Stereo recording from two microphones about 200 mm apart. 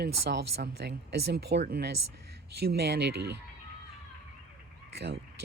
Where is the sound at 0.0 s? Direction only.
55° right (ahead or behind).